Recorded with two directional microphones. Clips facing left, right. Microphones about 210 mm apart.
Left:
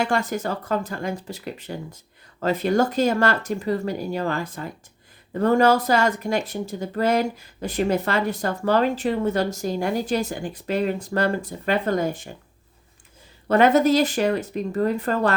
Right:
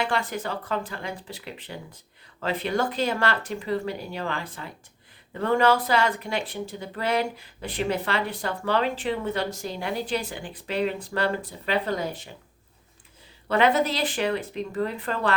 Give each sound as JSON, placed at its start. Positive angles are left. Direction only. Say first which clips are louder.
{"t": 0.0, "sound": "speech", "louder": "left 4 dB", "side_deg": 45}
{"t": 13.5, "sound": "speech", "louder": "left 6 dB", "side_deg": 45}